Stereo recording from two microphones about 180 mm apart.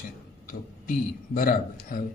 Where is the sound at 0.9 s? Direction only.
50° left (ahead or behind).